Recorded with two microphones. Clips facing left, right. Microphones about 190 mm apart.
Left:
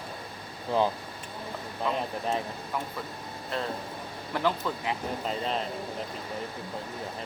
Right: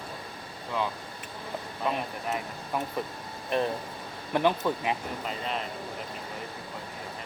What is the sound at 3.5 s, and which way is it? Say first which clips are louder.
Speech: right 5 dB; 20° right (ahead or behind).